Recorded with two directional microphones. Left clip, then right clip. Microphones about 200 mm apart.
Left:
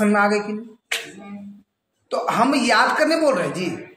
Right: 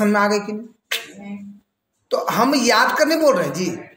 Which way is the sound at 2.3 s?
25° right (ahead or behind).